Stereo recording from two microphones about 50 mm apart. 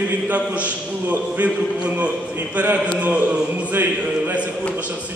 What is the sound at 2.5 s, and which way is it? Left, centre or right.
A man's voice, right.